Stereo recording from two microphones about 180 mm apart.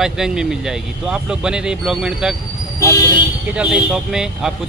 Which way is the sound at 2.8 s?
20° left (ahead or behind).